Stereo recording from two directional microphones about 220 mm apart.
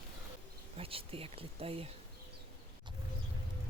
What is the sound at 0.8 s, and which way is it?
Speech, 25° right (ahead or behind).